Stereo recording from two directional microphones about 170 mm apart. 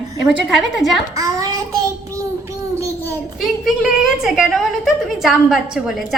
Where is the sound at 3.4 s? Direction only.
Centre (ahead or behind).